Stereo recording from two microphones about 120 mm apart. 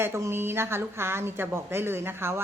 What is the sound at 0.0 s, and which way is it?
Speech, 20° right (ahead or behind).